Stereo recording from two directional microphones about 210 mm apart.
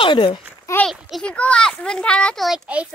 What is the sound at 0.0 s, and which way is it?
Speech, 25° left (ahead or behind).